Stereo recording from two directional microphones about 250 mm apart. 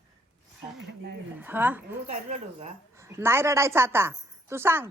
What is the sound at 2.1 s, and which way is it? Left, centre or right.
Speech, right.